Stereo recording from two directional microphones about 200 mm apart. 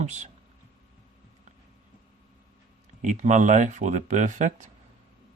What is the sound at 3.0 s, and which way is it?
Speech, 35° right (ahead or behind).